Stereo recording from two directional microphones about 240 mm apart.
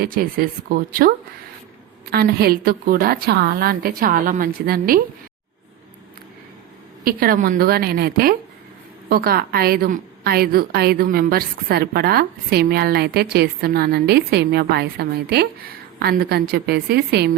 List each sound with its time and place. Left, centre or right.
0.0 s a woman's voice: right
7.0 s a woman's voice: right